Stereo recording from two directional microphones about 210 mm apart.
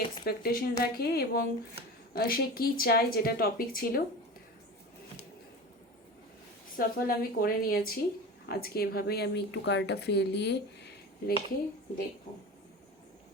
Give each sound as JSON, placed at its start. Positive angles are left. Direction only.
{"t": 0.3, "sound": "speech", "side_deg": 45}
{"t": 6.7, "sound": "speech", "side_deg": 45}